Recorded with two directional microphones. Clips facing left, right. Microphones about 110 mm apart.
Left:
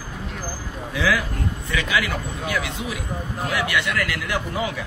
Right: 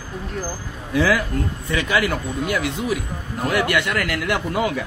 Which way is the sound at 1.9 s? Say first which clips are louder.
Right 4 dB; 45° right (ahead or behind).